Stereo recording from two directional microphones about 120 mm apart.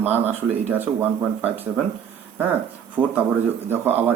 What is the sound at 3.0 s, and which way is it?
Speech, 15° right (ahead or behind).